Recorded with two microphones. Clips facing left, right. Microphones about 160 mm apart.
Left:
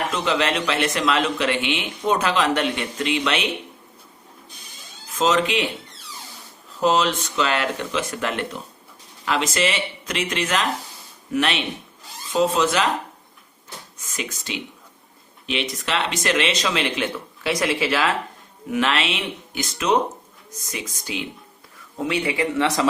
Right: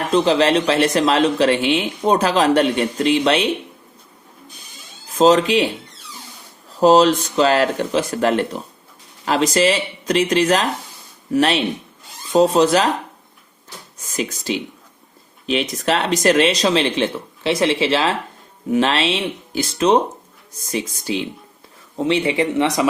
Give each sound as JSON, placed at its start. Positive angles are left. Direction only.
{"t": 0.1, "sound": "speech", "side_deg": -35}
{"t": 5.1, "sound": "speech", "side_deg": -35}
{"t": 6.7, "sound": "speech", "side_deg": -35}
{"t": 14.0, "sound": "speech", "side_deg": -35}